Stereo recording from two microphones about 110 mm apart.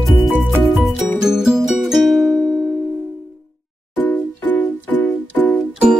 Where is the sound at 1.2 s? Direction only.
5° right (ahead or behind).